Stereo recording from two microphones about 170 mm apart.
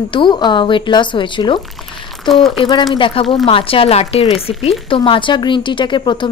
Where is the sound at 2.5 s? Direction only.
25° left (ahead or behind).